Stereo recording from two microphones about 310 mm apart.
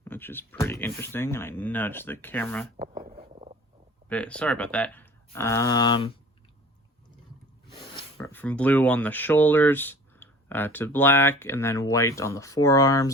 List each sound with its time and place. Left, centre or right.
0.0 s speech: centre
3.1 s a sound: centre
4.1 s speech: centre
7.9 s speech: centre